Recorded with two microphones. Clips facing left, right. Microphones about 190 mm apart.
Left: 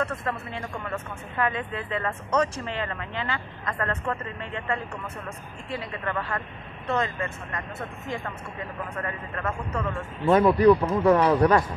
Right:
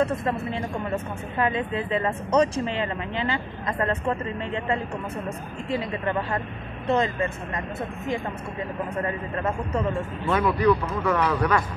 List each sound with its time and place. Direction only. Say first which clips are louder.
0.0 s speech: right 5 dB; 20° right (ahead or behind)
9.0 s speech: right 3 dB; 25° right (ahead or behind)
10.2 s speech: left 4 dB; 35° left (ahead or behind)